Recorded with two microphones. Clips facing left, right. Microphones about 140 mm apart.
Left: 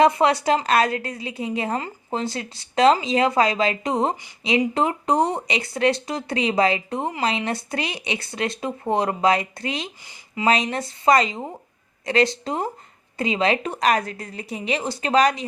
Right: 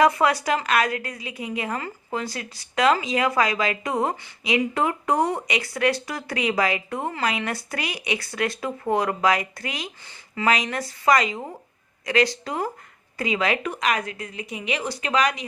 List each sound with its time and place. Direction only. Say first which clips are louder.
0.0 s a woman's voice: left 2 dB; 25° left (ahead or behind)
10.0 s speech: left 2 dB; 15° left (ahead or behind)
10.4 s a woman's voice: left 2 dB; 25° left (ahead or behind)